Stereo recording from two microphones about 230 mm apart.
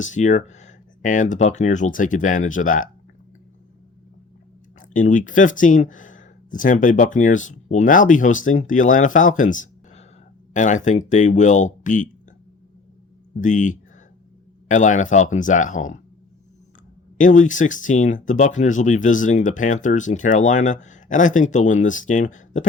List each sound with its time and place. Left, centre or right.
0.0 s speech: left
4.8 s speech: left
13.4 s speech: left
17.2 s speech: left